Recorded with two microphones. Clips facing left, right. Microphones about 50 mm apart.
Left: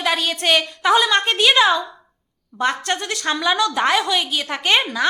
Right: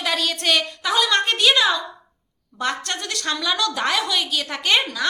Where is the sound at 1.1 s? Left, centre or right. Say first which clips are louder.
Left 2 dB; centre.